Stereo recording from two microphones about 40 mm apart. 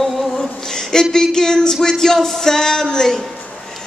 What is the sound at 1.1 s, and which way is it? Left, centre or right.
Music, centre.